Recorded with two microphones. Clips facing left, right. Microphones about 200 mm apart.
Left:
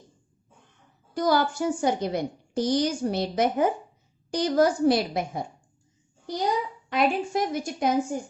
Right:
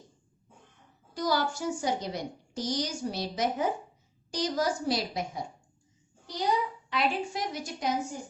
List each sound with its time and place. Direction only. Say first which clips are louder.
1.1 s a woman's voice: left 6 dB; 55° left (ahead or behind)